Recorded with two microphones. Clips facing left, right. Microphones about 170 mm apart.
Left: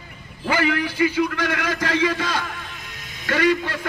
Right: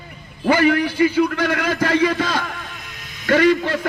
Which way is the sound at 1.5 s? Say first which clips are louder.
Right 4 dB; 35° right (ahead or behind).